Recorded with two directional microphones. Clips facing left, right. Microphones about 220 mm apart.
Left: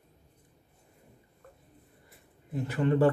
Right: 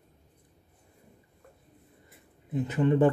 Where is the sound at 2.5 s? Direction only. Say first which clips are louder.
Right 2 dB; 20° right (ahead or behind).